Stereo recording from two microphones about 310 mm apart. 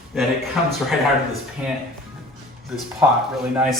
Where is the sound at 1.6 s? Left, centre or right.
Centre.